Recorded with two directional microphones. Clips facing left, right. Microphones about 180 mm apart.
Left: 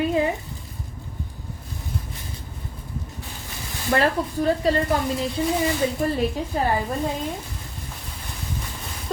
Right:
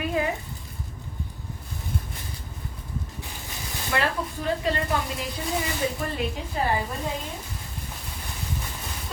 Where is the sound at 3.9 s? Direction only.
40° left (ahead or behind).